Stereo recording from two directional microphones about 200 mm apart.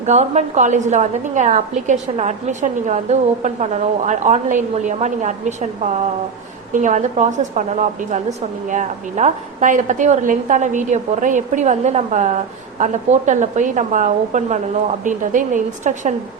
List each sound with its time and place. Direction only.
0.0 s a woman's voice: 35° right (ahead or behind)
6.7 s a woman's voice: 35° right (ahead or behind)